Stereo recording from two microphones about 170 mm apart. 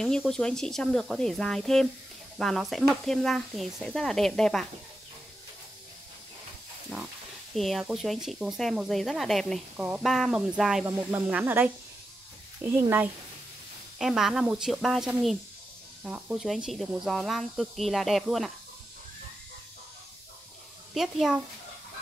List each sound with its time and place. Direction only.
0.0 s speech: 5° left (ahead or behind)
7.5 s speech: centre (ahead or behind)
10.9 s speech: 15° right (ahead or behind)
20.9 s speech: centre (ahead or behind)